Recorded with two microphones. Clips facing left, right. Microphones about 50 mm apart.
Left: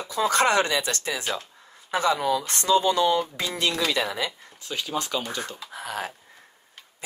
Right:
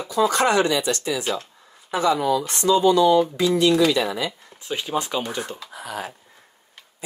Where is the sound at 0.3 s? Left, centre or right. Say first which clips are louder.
Left 2 dB; left.